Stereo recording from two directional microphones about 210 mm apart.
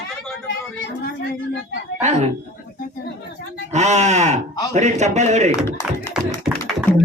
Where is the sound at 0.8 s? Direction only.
50° left (ahead or behind).